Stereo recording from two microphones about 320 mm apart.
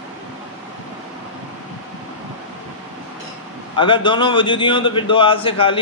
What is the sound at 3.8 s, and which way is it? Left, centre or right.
A man's voice, centre.